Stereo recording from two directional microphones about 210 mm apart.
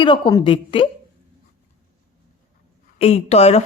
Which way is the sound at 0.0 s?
20° left (ahead or behind).